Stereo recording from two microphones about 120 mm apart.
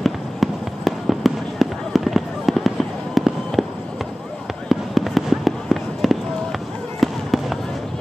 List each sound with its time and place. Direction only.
0.0 s fireworks: centre (ahead or behind)
4.6 s fireworks: centre (ahead or behind)